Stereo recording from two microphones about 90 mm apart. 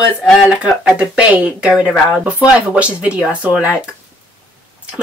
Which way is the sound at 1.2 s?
10° right (ahead or behind).